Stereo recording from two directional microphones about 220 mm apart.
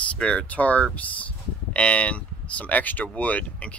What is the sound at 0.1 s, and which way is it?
Speech, 5° left (ahead or behind).